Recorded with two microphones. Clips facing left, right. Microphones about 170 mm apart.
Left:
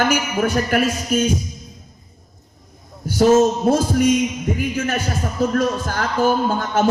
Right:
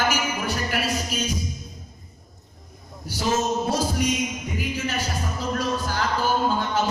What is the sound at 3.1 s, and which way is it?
Speech, 55° left (ahead or behind).